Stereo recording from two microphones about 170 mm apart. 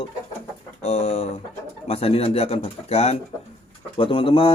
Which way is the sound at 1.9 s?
35° left (ahead or behind).